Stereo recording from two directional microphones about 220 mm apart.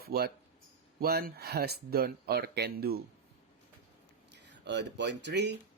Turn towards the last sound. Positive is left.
turn(degrees=-50)  # may be behind; listen again after turning